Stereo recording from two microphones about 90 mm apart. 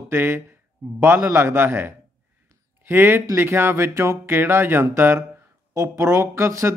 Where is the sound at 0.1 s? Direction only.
25° right (ahead or behind).